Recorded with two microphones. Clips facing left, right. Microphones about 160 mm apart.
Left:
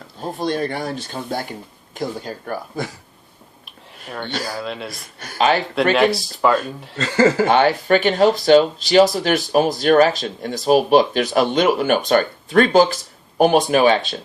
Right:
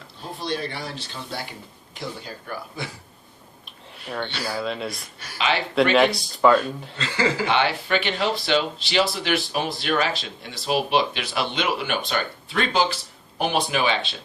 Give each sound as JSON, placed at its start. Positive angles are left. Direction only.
{"t": 0.2, "sound": "speech", "side_deg": 45}
{"t": 4.5, "sound": "speech", "side_deg": 0}
{"t": 5.2, "sound": "speech", "side_deg": 45}
{"t": 5.9, "sound": "speech", "side_deg": 0}
{"t": 6.9, "sound": "speech", "side_deg": 45}